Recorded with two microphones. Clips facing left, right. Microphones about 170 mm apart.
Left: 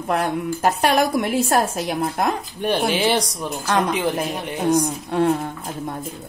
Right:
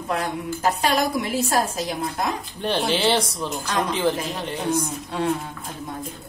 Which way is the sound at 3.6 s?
55° left (ahead or behind).